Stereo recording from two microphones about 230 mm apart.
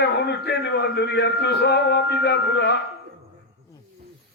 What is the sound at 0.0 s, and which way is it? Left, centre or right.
A man's voice, left.